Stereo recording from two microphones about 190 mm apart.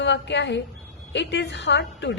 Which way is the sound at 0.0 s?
65° left (ahead or behind).